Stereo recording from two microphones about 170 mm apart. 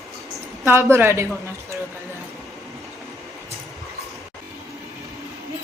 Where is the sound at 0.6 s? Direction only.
15° right (ahead or behind).